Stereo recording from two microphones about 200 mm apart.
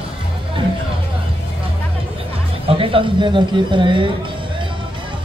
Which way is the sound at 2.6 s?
25° right (ahead or behind).